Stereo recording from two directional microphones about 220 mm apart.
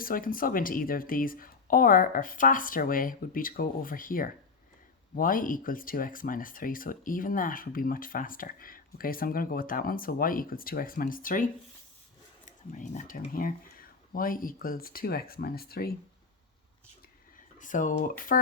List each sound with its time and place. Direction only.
0.0 s speech: 40° left (ahead or behind)
12.5 s speech: 35° left (ahead or behind)
17.6 s speech: 35° left (ahead or behind)